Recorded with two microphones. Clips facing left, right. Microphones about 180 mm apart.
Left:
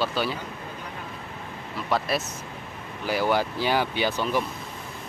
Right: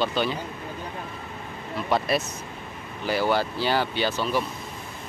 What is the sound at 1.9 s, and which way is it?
Speech, centre (ahead or behind).